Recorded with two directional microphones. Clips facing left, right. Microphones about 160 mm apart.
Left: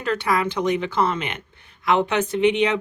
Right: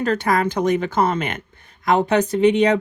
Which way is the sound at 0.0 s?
45° right (ahead or behind).